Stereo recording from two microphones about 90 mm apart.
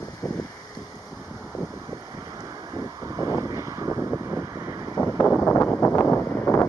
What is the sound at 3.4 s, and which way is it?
Vehicle, 35° right (ahead or behind).